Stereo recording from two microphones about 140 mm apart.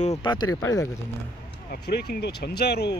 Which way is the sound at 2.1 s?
90° left.